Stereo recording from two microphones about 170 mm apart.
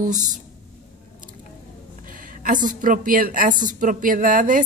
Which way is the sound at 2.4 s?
50° right (ahead or behind).